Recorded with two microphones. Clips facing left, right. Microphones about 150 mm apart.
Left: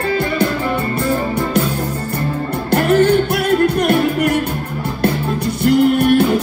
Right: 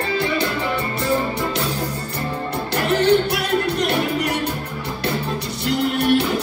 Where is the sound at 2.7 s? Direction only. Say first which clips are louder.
Left 5 dB; 50° left (ahead or behind).